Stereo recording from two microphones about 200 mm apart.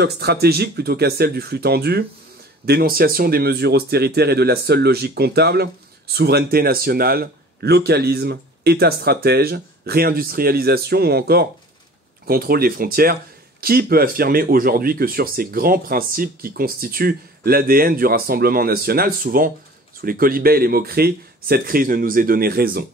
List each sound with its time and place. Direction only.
0.0 s speech: 55° right (ahead or behind)